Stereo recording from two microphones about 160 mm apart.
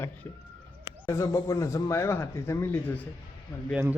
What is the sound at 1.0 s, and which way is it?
Speech, 20° left (ahead or behind).